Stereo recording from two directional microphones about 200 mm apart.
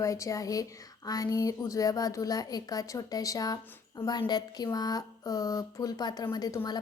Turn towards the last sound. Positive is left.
turn(degrees=20)  # may be behind; listen again after turning